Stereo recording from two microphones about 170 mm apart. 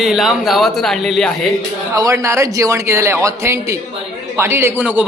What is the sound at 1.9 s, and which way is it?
A man's voice, 20° right (ahead or behind).